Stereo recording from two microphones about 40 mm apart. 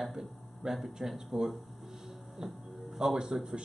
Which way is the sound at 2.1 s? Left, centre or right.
Centre.